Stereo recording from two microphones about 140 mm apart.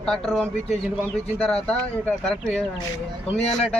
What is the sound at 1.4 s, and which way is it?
Speech, 5° left (ahead or behind).